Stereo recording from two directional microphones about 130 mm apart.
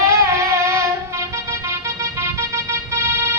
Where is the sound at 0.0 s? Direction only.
20° right (ahead or behind).